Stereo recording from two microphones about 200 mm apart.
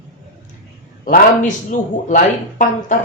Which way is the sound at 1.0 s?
40° left (ahead or behind).